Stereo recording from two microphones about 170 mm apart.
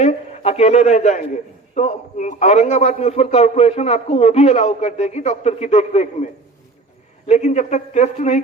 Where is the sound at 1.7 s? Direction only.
45° left (ahead or behind).